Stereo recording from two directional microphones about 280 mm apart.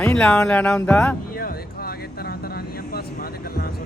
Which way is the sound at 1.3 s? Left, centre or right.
Left.